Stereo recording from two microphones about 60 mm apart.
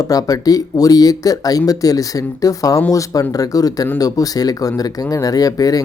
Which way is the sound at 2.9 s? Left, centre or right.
Left.